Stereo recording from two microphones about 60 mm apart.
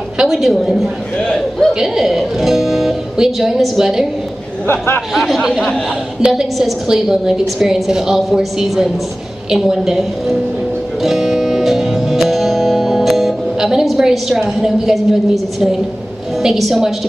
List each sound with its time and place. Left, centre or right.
0.2 s speech: centre
1.7 s speech: centre
4.6 s a man's voice: left
5.1 s a woman's voice: centre
11.0 s music: centre
14.4 s a woman's voice: centre